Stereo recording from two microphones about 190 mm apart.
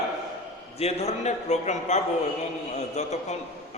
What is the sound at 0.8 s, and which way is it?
A man's voice, 35° left (ahead or behind).